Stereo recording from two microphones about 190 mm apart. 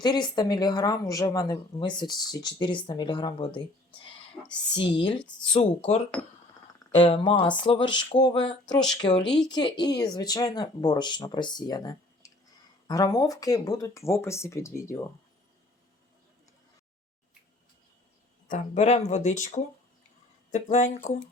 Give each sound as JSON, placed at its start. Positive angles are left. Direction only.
{"t": 0.0, "sound": "speech", "side_deg": 20}
{"t": 4.7, "sound": "speech", "side_deg": 25}
{"t": 18.4, "sound": "speech", "side_deg": 40}